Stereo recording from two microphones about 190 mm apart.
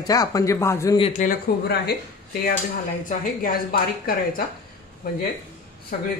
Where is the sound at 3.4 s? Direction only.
50° left (ahead or behind).